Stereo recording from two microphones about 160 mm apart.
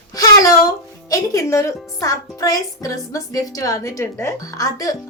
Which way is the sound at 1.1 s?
20° left (ahead or behind).